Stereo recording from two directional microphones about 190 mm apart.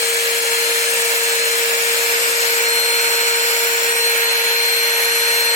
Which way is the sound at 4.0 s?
15° left (ahead or behind).